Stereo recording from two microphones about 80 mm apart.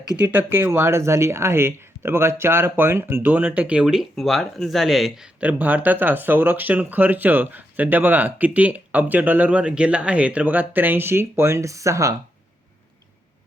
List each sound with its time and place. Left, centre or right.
0.2 s speech: right
3.8 s speech: centre
5.4 s speech: centre; by 12.1 s right